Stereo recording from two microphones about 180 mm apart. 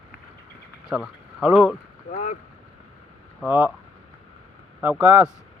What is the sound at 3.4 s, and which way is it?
Speech, 10° right (ahead or behind).